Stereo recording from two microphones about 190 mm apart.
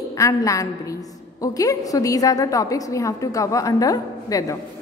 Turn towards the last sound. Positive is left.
turn(degrees=20)  # may be behind; listen again after turning